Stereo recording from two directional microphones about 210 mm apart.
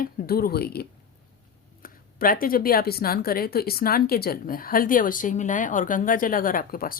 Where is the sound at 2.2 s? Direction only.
45° left (ahead or behind).